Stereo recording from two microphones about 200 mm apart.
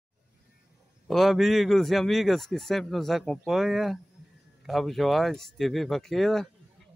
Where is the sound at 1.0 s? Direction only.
Centre (ahead or behind).